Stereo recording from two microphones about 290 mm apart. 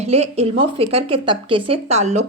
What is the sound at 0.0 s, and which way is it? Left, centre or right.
Speech, right.